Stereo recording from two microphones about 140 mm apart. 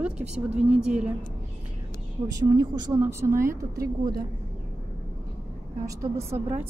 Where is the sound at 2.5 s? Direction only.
25° right (ahead or behind).